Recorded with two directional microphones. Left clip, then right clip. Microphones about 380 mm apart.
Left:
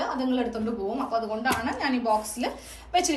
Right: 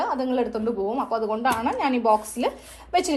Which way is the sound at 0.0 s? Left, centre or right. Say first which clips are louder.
Right 3 dB; centre.